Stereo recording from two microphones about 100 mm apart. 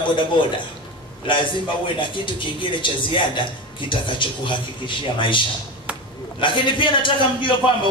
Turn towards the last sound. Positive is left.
turn(degrees=55)  # may be behind; listen again after turning